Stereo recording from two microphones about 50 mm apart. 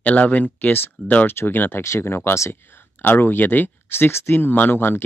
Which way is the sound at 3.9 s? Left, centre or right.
Left.